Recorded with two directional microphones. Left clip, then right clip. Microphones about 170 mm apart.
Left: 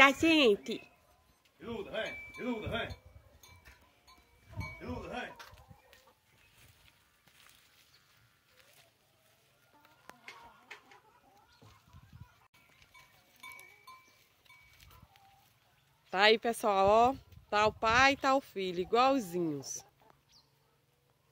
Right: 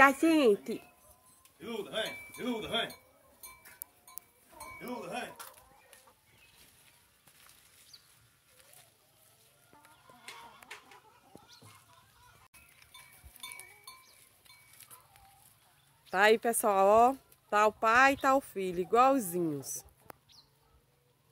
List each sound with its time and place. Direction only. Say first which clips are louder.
0.0 s speech: right 1 dB; centre (ahead or behind)
1.6 s speech: right 2 dB; 30° left (ahead or behind)
4.7 s music: right 3 dB; centre (ahead or behind)
16.1 s speech: right 1 dB; centre (ahead or behind)